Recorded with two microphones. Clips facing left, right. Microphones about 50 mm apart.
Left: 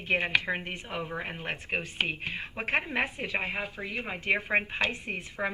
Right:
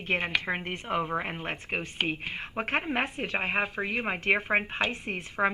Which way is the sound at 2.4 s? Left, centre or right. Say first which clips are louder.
Left 1 dB; right.